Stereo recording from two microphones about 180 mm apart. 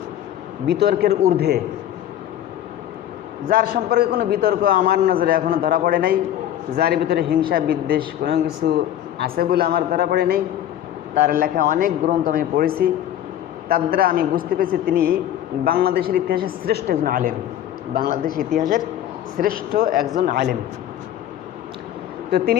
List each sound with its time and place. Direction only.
0.7 s a man's voice: 60° right (ahead or behind)
3.5 s a man's voice: 55° right (ahead or behind)
18.4 s speech: 50° right (ahead or behind)
22.3 s speech: 65° right (ahead or behind)